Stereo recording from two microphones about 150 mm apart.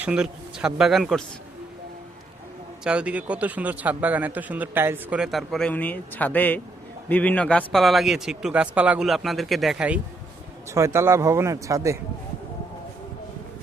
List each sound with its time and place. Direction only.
0.0 s a man's voice: 5° right (ahead or behind)
2.8 s a man's voice: 5° right (ahead or behind)
10.7 s speech: 20° right (ahead or behind)